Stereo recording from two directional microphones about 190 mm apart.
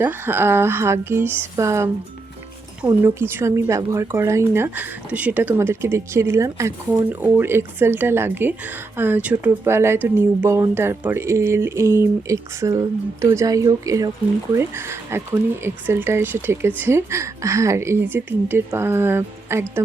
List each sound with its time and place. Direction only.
0.0 s speech: 10° right (ahead or behind)
3.0 s speech: 10° right (ahead or behind)